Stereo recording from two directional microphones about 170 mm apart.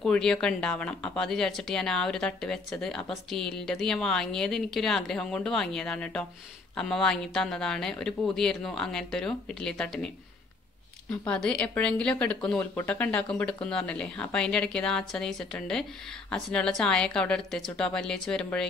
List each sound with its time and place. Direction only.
0.0 s speech: 5° left (ahead or behind)